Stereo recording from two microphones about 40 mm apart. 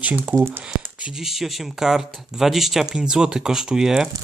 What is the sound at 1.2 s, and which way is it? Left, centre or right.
Speech, centre.